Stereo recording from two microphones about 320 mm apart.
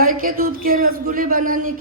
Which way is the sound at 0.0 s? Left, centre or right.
Right.